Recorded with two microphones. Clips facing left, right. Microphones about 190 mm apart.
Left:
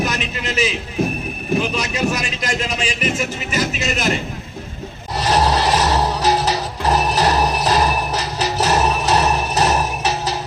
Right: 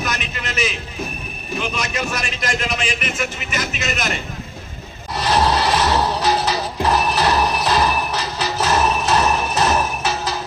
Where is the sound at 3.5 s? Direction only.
35° left (ahead or behind).